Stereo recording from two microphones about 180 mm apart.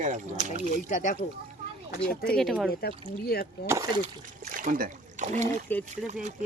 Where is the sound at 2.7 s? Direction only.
60° left (ahead or behind).